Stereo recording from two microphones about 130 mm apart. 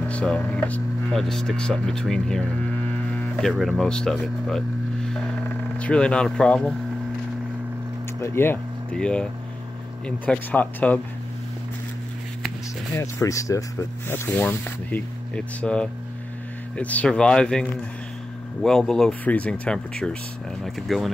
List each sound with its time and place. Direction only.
0.1 s speech: 10° left (ahead or behind)
8.2 s speech: 15° left (ahead or behind)
8.9 s speech: 5° left (ahead or behind)
12.9 s speech: 25° left (ahead or behind); by 21.1 s centre (ahead or behind)